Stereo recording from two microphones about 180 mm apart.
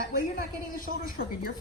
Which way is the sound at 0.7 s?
55° left (ahead or behind).